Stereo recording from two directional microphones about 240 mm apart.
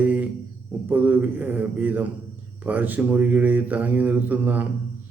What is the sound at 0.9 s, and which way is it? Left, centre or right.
A man's voice, centre.